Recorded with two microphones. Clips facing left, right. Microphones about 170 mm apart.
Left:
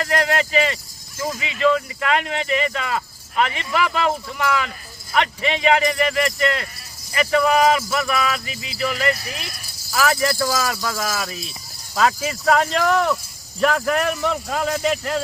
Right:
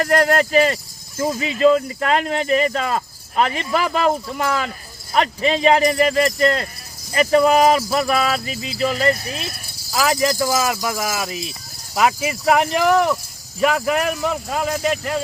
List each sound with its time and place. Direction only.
0.0 s speech: 45° right (ahead or behind); by 15.2 s centre (ahead or behind)